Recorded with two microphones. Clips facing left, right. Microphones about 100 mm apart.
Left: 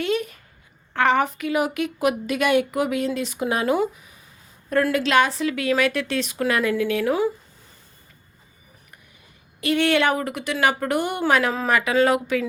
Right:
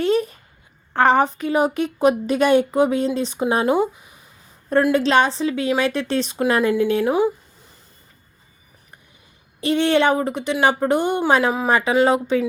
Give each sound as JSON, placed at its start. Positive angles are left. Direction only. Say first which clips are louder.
{"t": 0.0, "sound": "a sound", "louder": "right 5 dB", "side_deg": -35}
{"t": 0.9, "sound": "a woman's voice", "louder": "right 4 dB", "side_deg": -35}
{"t": 9.6, "sound": "speech", "louder": "right 3 dB", "side_deg": -25}